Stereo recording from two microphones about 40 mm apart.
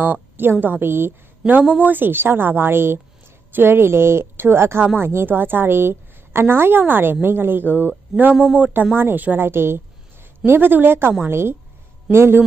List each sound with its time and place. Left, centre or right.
0.0 s a woman's voice: right
1.6 s a woman's voice: right
4.9 s a woman's voice: right
9.4 s a woman's voice: right
10.4 s a woman's voice: right
11.2 s a woman's voice: right